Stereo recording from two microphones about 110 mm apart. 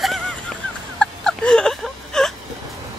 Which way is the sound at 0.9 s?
10° left (ahead or behind).